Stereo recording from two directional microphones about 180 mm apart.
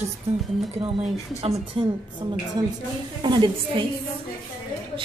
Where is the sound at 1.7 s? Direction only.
30° right (ahead or behind).